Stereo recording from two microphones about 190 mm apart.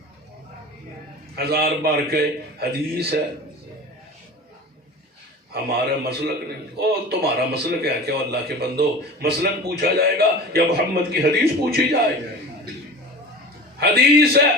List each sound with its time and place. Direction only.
1.4 s a man's voice: 55° right (ahead or behind)
5.5 s a man's voice: 55° right (ahead or behind)
13.7 s a man's voice: 55° right (ahead or behind)